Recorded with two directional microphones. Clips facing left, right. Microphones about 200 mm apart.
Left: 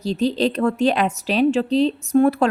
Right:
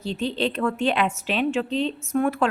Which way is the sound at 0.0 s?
40° left (ahead or behind).